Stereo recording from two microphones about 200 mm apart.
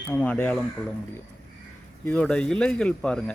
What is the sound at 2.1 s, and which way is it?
Speech, 5° left (ahead or behind).